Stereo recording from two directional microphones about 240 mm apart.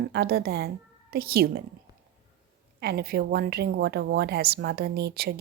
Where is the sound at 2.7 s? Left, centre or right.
Right.